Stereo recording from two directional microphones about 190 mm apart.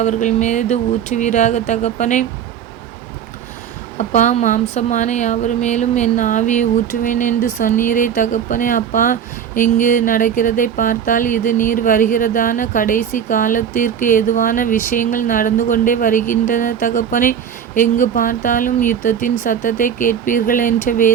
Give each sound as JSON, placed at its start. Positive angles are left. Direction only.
{"t": 0.0, "sound": "a woman's voice", "side_deg": 40}
{"t": 3.9, "sound": "a woman's voice", "side_deg": 40}
{"t": 9.7, "sound": "a sound", "side_deg": 40}